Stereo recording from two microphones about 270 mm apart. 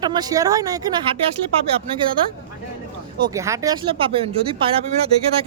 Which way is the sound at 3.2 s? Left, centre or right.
Centre.